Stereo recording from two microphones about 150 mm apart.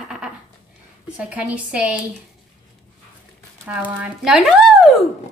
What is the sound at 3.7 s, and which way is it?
Speech, 10° right (ahead or behind).